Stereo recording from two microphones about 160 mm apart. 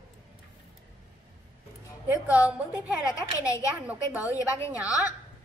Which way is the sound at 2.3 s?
10° right (ahead or behind).